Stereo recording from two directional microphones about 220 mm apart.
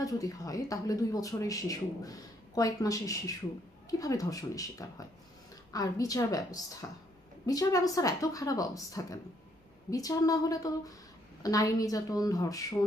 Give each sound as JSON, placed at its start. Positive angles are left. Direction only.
{"t": 0.0, "sound": "speech", "side_deg": 15}